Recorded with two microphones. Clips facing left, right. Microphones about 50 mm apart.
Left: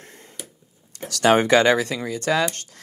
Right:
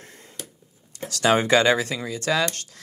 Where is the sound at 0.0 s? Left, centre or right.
Left.